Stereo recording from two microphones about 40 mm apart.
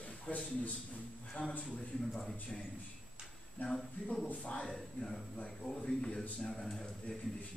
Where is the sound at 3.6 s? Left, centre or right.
Left.